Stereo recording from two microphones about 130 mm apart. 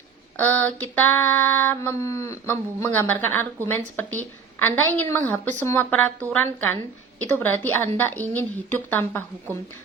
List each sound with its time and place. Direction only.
0.3 s female singing: 10° left (ahead or behind)